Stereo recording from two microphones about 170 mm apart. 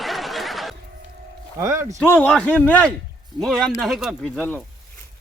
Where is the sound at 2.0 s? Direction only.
5° left (ahead or behind).